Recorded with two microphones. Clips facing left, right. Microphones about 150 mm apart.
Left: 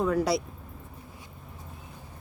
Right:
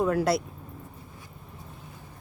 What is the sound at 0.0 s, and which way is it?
Speech, 5° right (ahead or behind).